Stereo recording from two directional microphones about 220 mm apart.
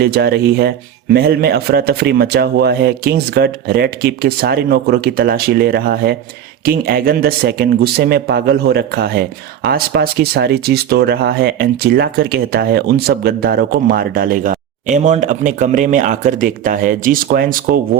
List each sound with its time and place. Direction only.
0.0 s speech: 45° right (ahead or behind)